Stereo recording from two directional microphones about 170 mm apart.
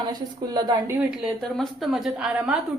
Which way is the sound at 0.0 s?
25° right (ahead or behind).